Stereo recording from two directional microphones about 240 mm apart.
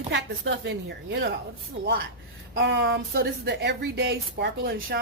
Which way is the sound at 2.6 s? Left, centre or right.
Right.